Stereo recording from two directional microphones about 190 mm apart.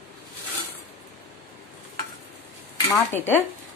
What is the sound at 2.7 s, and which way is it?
Speech, 10° left (ahead or behind).